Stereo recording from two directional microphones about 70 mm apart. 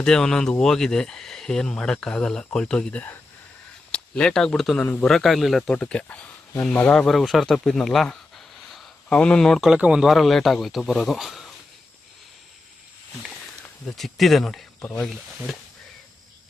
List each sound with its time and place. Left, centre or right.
0.0 s speech: centre
5.7 s speech: centre
6.9 s speech: centre
7.4 s a sound: centre
9.0 s speech: centre
9.6 s speech: centre
10.1 s speech: centre
13.8 s speech: centre